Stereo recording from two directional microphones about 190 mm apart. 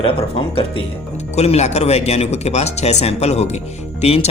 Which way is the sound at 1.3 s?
35° left (ahead or behind).